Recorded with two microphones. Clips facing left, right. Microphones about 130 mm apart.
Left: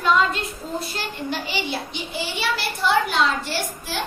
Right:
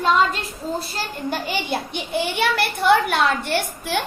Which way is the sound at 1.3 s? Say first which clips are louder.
Right 4 dB; 50° right (ahead or behind).